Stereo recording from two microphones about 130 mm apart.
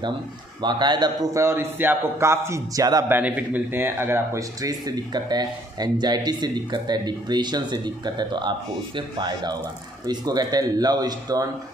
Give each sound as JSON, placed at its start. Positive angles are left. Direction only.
{"t": 0.6, "sound": "a man's voice", "side_deg": -35}
{"t": 3.1, "sound": "a man's voice", "side_deg": -10}